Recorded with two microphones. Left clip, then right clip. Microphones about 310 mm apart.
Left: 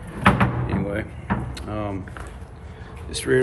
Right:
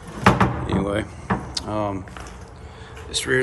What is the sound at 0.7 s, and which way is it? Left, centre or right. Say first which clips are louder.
Speech: right 3 dB; centre.